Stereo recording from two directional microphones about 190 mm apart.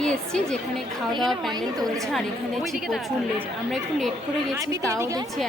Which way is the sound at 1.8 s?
Centre (ahead or behind).